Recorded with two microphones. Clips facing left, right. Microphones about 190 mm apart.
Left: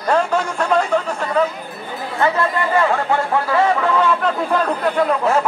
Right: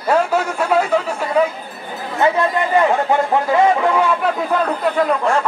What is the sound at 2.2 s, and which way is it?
Speech, 20° right (ahead or behind).